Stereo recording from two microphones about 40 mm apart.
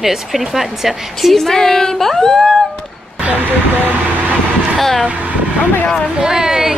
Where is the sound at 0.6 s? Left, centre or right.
Centre.